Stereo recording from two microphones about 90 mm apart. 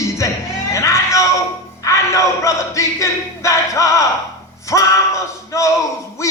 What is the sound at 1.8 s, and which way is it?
Speech, 35° left (ahead or behind).